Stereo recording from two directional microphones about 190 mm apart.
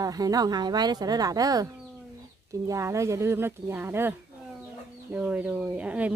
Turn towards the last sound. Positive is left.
turn(degrees=-5)  # may be behind; listen again after turning